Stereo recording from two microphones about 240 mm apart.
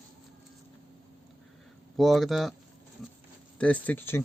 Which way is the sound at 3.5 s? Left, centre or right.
Centre.